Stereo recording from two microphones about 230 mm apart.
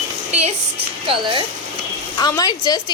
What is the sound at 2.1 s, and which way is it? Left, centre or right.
Speech, centre.